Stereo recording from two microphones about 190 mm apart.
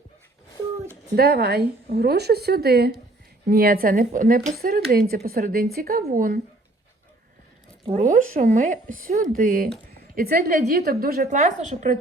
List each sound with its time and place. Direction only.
1.1 s a woman's voice: 55° right (ahead or behind)
7.9 s speech: 45° right (ahead or behind)